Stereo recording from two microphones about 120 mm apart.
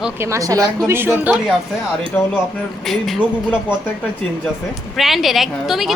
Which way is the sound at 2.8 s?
Centre (ahead or behind).